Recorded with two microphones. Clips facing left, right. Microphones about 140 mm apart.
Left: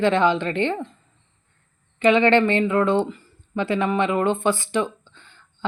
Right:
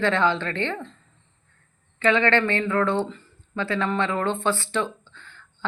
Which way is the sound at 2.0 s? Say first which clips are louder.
Left 4 dB; 15° left (ahead or behind).